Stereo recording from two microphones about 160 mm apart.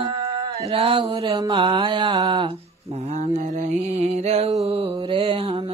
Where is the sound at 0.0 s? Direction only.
35° right (ahead or behind).